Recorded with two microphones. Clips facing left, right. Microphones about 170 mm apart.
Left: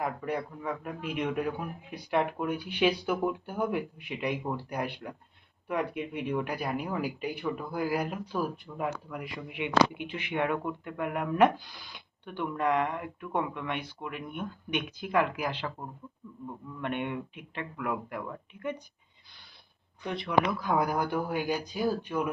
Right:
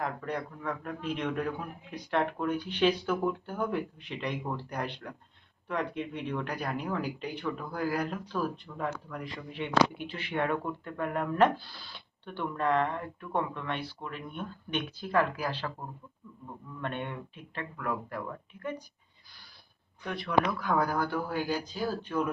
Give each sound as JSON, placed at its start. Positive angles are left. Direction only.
{"t": 0.0, "sound": "speech", "side_deg": 10}
{"t": 16.8, "sound": "speech", "side_deg": 15}
{"t": 20.1, "sound": "speech", "side_deg": 20}